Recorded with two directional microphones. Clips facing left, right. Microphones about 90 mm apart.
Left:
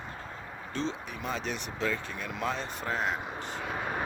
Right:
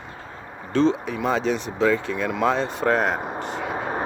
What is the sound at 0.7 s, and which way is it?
Speech, 70° right (ahead or behind).